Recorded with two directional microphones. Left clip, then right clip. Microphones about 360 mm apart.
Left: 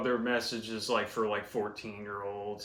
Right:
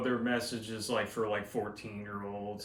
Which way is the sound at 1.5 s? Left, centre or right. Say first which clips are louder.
Left 2 dB; centre.